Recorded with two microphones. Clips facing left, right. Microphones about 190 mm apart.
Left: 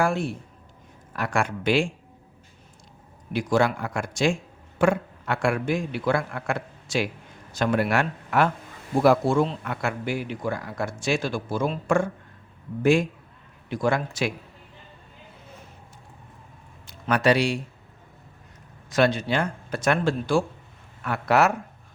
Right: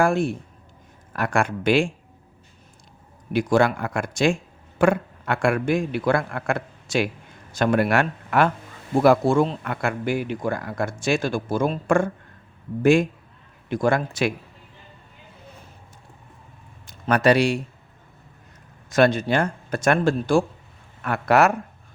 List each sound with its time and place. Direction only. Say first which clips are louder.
0.0 s speech: right 4 dB; 50° right (ahead or behind)
3.3 s a man's voice: right 3 dB; 55° right (ahead or behind)
17.1 s speech: right 3 dB; 45° right (ahead or behind)
18.9 s a man's voice: right 3 dB; 50° right (ahead or behind)